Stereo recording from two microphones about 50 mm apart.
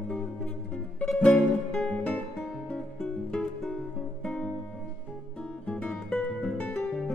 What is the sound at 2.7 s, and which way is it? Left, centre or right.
Music, centre.